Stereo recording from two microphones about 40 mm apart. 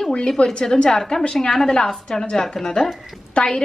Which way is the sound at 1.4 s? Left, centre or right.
Centre.